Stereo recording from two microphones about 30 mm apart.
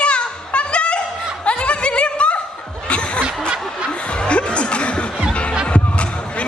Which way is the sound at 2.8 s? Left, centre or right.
Left.